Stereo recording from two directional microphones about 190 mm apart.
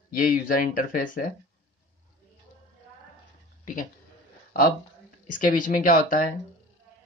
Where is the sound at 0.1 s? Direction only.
50° left (ahead or behind).